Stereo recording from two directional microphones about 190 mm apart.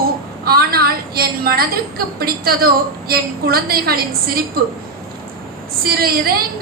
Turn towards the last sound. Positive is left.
turn(degrees=-50)  # may be behind; listen again after turning